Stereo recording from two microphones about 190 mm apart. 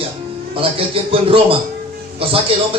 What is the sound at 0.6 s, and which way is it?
Speech, 30° right (ahead or behind).